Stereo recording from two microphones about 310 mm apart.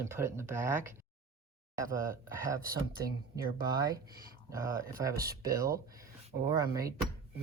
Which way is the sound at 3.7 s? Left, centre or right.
Centre.